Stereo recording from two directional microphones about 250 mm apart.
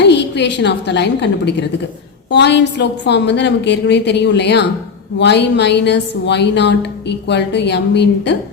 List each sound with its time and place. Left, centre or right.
0.0 s a woman's voice: left